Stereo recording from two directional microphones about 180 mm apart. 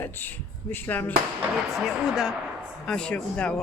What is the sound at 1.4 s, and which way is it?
Speech, centre (ahead or behind).